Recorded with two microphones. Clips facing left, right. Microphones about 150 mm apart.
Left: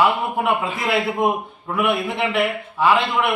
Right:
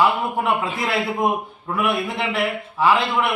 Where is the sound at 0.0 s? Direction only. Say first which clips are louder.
Left 1 dB; centre (ahead or behind).